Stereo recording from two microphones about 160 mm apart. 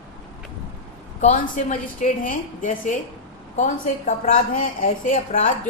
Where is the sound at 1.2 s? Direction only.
50° left (ahead or behind).